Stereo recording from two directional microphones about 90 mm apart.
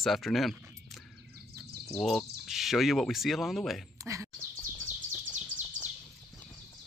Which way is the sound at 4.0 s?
35° right (ahead or behind).